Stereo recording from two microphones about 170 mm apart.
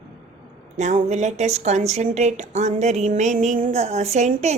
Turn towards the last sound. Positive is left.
turn(degrees=-40)  # may be behind; listen again after turning